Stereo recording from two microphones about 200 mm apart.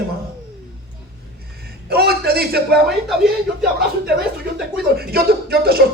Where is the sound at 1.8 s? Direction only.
50° right (ahead or behind).